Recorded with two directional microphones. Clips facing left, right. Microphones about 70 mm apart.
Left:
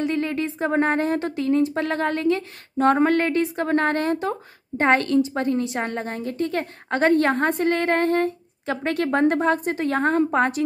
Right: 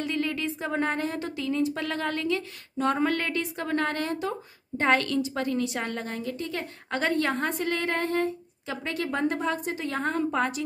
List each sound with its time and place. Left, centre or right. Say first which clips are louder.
0.1 s speech: left 5 dB; left